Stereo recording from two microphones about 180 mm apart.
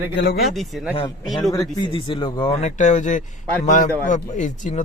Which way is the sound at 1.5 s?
20° left (ahead or behind).